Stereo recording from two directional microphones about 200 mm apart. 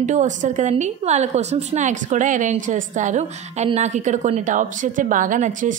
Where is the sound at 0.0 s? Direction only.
35° right (ahead or behind).